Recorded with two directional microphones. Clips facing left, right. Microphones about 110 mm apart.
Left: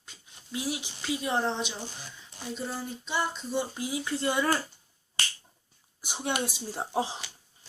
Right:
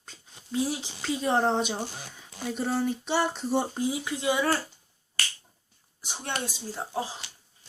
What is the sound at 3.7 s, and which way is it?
Speech, 30° right (ahead or behind).